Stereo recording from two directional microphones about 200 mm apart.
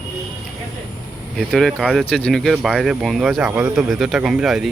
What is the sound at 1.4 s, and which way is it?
Speech, centre (ahead or behind).